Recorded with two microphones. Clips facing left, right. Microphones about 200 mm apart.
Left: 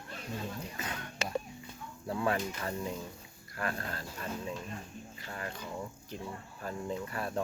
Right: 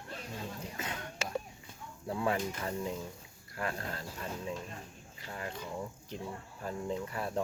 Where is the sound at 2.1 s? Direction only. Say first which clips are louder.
Even; 15° right (ahead or behind).